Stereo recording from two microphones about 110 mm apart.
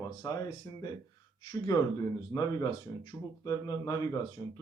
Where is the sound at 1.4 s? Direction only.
45° left (ahead or behind).